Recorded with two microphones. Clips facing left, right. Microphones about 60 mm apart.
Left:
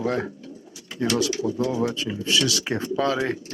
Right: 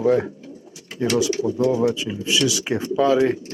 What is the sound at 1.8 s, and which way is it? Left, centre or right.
Speech, centre.